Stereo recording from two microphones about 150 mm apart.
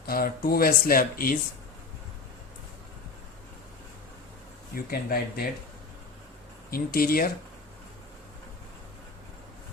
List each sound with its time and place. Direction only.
0.0 s speech: 85° left
4.7 s speech: 80° left
6.7 s speech: 80° left